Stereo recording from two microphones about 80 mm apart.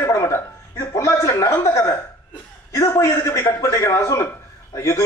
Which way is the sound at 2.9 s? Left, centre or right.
Left.